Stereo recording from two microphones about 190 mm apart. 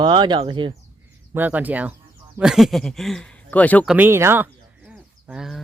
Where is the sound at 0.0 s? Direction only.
25° right (ahead or behind).